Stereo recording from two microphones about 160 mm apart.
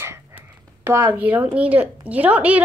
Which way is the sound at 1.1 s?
10° right (ahead or behind).